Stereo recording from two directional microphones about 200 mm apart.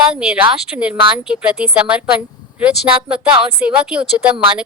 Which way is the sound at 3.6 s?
5° right (ahead or behind).